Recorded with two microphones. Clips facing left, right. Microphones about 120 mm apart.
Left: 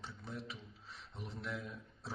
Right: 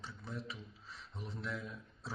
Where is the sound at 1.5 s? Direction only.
Centre (ahead or behind).